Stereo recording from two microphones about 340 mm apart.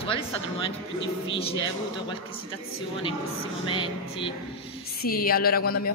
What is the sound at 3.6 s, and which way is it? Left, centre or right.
Speech, centre.